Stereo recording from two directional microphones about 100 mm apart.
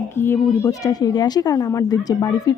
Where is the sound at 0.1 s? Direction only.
25° left (ahead or behind).